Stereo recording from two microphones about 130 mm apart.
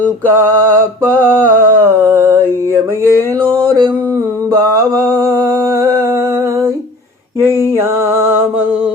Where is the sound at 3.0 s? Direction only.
15° left (ahead or behind).